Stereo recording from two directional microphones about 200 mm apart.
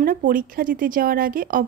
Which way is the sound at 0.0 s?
45° right (ahead or behind).